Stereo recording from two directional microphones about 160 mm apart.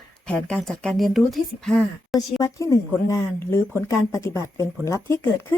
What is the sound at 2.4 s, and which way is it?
Speech, 20° left (ahead or behind).